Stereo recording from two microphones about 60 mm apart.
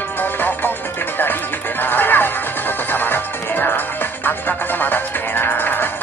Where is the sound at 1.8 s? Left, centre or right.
Left.